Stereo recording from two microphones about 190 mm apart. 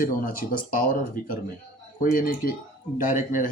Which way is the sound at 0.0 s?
50° left (ahead or behind).